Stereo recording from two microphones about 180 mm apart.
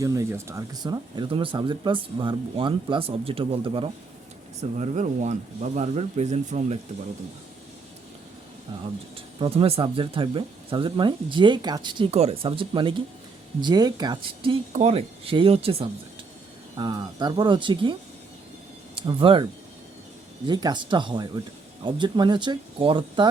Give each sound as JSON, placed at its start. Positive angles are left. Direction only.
{"t": 0.0, "sound": "speech", "side_deg": -15}
{"t": 4.8, "sound": "speech", "side_deg": -40}
{"t": 8.7, "sound": "speech", "side_deg": -25}
{"t": 18.9, "sound": "speech", "side_deg": -30}
{"t": 20.5, "sound": "speech", "side_deg": -25}